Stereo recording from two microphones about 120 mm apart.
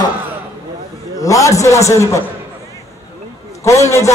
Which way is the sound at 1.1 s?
25° left (ahead or behind).